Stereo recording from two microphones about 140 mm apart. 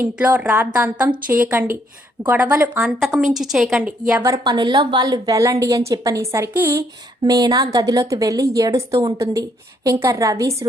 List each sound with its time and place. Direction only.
0.0 s a woman's voice: 15° right (ahead or behind)
3.3 s a woman's voice: 5° right (ahead or behind)
4.1 s a woman's voice: 25° right (ahead or behind)
7.2 s a woman's voice: 30° right (ahead or behind)